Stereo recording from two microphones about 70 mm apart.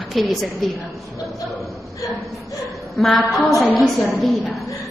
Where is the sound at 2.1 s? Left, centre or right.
Centre.